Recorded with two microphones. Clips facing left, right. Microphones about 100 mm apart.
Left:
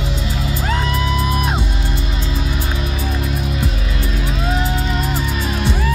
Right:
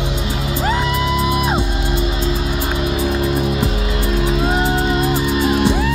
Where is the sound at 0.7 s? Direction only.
5° right (ahead or behind).